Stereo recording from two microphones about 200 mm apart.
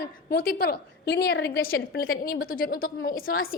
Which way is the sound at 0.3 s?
50° left (ahead or behind).